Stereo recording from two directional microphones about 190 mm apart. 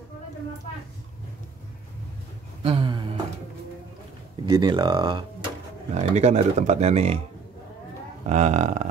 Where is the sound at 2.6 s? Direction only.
25° right (ahead or behind).